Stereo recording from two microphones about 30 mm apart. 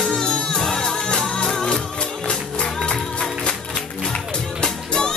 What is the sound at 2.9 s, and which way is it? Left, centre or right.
Music, left.